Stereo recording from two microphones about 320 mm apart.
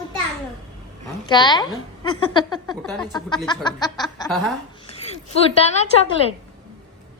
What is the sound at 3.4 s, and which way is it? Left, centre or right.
Snicker, centre.